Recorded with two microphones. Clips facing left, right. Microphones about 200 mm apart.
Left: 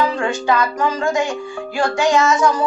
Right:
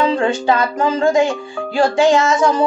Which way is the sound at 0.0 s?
30° right (ahead or behind).